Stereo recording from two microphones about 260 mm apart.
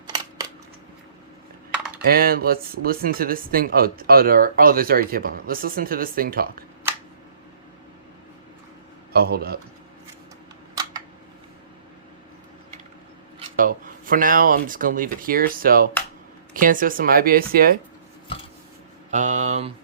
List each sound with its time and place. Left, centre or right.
2.0 s speech: right
9.1 s speech: right
13.6 s speech: right
19.1 s mantra: right